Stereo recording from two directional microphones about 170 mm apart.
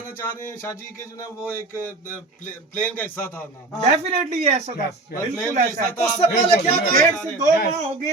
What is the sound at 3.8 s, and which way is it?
Speech, 40° right (ahead or behind).